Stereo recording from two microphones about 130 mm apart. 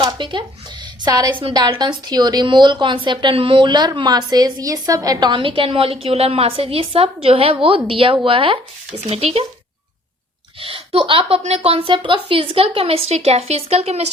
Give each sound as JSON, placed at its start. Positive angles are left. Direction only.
{"t": 0.0, "sound": "a sound", "side_deg": -35}
{"t": 1.0, "sound": "a woman's voice", "side_deg": -25}
{"t": 10.6, "sound": "a woman's voice", "side_deg": -45}